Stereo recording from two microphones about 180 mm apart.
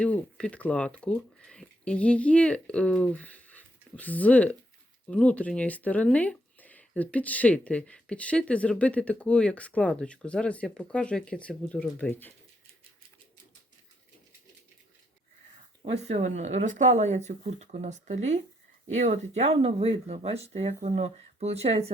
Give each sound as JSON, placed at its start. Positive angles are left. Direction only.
{"t": 0.0, "sound": "speech", "side_deg": 5}
{"t": 15.8, "sound": "speech", "side_deg": -35}